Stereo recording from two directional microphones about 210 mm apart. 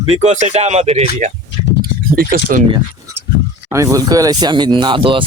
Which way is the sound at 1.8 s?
45° right (ahead or behind).